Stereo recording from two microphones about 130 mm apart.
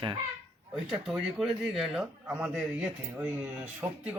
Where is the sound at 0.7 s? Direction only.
Centre (ahead or behind).